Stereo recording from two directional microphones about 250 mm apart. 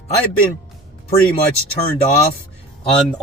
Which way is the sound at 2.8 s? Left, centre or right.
Left.